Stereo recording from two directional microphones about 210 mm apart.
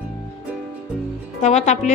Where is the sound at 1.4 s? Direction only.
35° left (ahead or behind).